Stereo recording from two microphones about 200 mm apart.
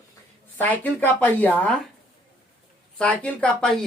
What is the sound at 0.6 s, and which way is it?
Speech, 10° left (ahead or behind).